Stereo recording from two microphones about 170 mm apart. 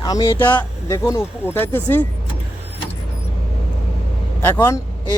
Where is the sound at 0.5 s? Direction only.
20° left (ahead or behind).